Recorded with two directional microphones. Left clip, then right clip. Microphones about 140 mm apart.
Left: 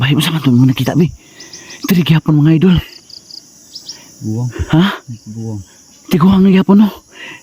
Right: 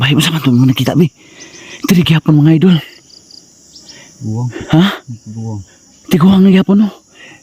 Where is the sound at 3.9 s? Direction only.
15° right (ahead or behind).